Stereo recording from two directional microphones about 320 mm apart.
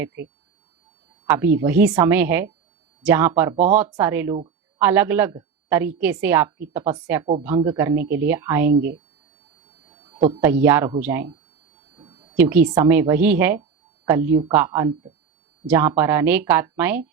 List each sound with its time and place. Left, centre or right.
0.0 s a woman's voice: centre
1.5 s a woman's voice: centre
9.9 s a sound: centre
10.5 s a woman's voice: centre
11.9 s a sound: centre
12.4 s a woman's voice: centre
13.6 s a sound: centre
14.2 s speech: right
14.4 s a woman's voice: centre